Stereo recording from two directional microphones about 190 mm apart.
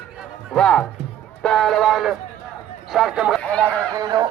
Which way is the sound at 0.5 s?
5° left (ahead or behind).